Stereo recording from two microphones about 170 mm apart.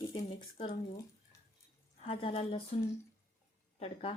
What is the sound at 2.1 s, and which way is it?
Speech, 35° left (ahead or behind).